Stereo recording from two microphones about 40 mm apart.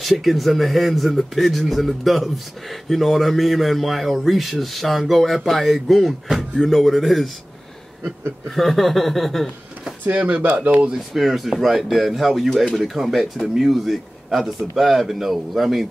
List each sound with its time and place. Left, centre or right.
0.0 s speech: centre
8.5 s speech: centre
10.6 s speech: right
11.1 s speech: centre